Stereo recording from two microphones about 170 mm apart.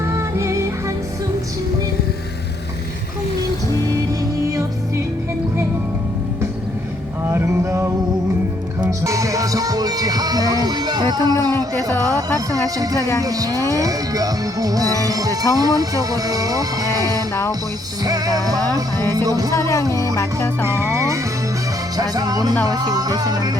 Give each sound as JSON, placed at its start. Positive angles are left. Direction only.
{"t": 0.1, "sound": "music", "side_deg": -15}
{"t": 4.4, "sound": "music", "side_deg": -20}
{"t": 7.3, "sound": "a sound", "side_deg": -15}
{"t": 8.8, "sound": "music", "side_deg": -20}
{"t": 19.5, "sound": "speech", "side_deg": 15}
{"t": 20.7, "sound": "music", "side_deg": -15}